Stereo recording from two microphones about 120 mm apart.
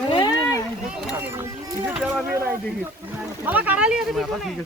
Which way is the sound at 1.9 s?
5° right (ahead or behind).